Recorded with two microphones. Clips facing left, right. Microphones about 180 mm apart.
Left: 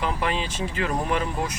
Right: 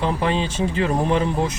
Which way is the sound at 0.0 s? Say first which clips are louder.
Right 5 dB; 30° right (ahead or behind).